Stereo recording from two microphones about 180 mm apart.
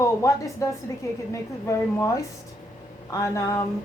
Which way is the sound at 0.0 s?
15° left (ahead or behind).